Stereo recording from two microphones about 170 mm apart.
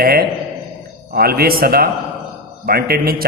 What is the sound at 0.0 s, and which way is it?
A man's voice, 65° right (ahead or behind).